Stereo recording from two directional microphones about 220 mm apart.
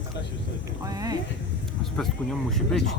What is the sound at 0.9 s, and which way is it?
Boat, 15° right (ahead or behind).